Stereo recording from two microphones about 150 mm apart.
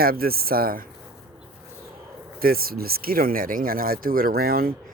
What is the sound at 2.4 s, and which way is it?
Speech, 80° right.